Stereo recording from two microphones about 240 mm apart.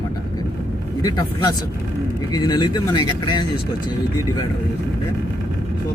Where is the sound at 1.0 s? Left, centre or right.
Centre.